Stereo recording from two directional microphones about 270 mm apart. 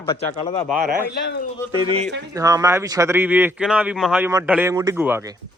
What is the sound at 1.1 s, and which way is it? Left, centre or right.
Speech, left.